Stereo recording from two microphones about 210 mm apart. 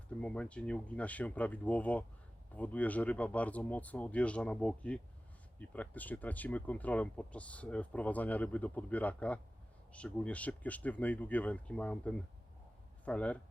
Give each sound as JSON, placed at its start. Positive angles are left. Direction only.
{"t": 0.2, "sound": "speech", "side_deg": 5}